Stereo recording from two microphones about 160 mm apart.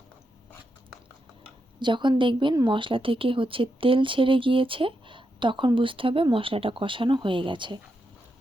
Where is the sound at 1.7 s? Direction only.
30° right (ahead or behind).